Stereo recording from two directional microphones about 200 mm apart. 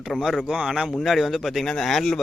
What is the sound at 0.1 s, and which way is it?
Speech, centre (ahead or behind).